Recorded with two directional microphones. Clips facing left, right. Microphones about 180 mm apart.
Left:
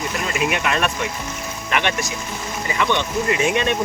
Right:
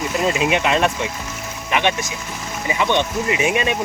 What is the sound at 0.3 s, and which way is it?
Speech, 20° right (ahead or behind).